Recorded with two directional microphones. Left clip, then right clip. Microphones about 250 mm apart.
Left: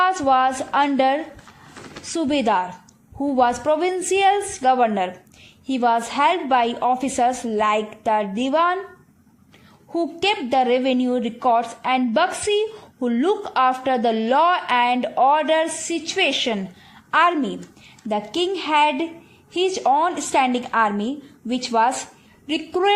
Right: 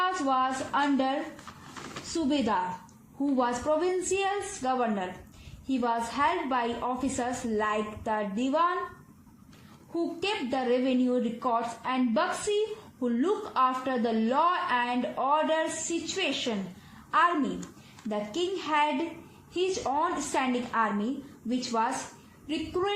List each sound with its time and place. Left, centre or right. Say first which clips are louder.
0.0 s a woman's voice: left 10 dB; left
9.9 s a woman's voice: left 9 dB; left
18.1 s a woman's voice: left 8 dB; left